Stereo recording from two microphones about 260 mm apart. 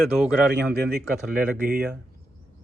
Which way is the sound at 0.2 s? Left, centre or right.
Centre.